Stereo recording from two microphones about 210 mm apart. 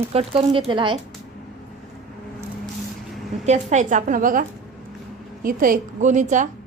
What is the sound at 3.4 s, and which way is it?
A woman's voice, 35° right (ahead or behind).